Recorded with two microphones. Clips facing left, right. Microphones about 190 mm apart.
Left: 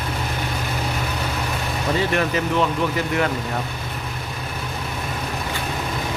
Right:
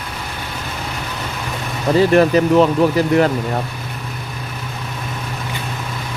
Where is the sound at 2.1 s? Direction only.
35° right (ahead or behind).